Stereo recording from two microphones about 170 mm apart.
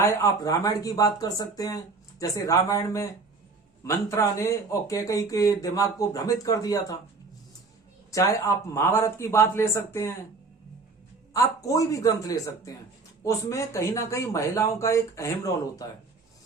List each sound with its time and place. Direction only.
0.0 s speech: 15° left (ahead or behind)
8.1 s speech: 20° left (ahead or behind)
11.3 s speech: 20° left (ahead or behind)